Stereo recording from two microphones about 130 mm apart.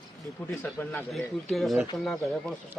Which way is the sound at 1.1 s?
Centre (ahead or behind).